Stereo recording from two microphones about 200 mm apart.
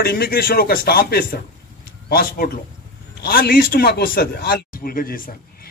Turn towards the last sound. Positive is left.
turn(degrees=45)  # may be behind; listen again after turning